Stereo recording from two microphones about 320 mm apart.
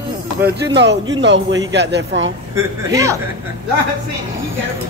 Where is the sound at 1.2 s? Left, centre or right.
Right.